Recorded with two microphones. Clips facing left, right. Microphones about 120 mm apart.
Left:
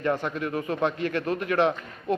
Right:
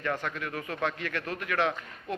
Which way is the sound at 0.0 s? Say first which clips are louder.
Left 6 dB; 25° left (ahead or behind).